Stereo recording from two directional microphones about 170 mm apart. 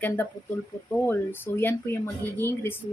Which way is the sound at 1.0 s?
10° left (ahead or behind).